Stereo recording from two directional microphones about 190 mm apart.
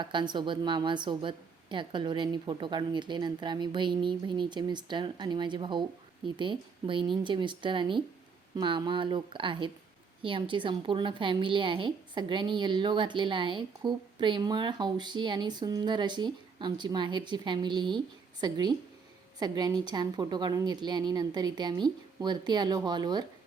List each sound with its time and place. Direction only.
0.0 s a woman's voice: 25° right (ahead or behind)